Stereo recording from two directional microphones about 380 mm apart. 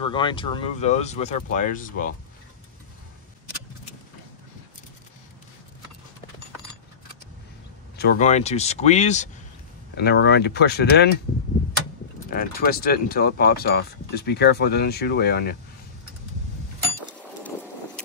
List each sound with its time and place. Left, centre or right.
0.0 s speech: centre
8.0 s speech: left
12.3 s speech: left